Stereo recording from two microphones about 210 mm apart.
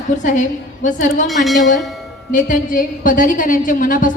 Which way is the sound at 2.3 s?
40° left (ahead or behind).